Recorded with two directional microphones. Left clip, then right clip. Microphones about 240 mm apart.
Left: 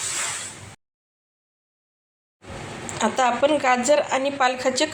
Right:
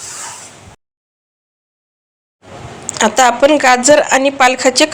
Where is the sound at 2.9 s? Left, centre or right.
Right.